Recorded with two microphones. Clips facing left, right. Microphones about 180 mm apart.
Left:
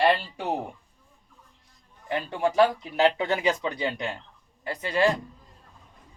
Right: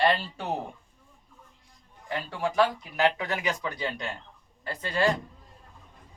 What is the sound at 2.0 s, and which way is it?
Speech, 20° left (ahead or behind).